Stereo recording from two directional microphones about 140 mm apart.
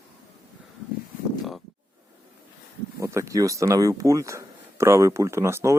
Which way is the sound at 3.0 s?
20° right (ahead or behind).